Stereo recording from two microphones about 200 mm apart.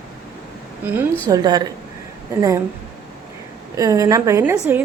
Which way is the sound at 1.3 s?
20° right (ahead or behind).